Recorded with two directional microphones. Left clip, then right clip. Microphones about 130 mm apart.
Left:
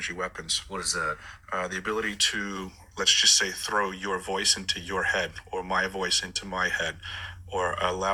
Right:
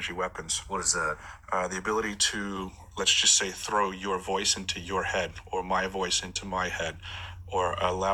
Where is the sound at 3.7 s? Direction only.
5° left (ahead or behind).